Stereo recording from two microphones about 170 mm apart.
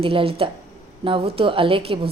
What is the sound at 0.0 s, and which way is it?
Speech, 35° right (ahead or behind).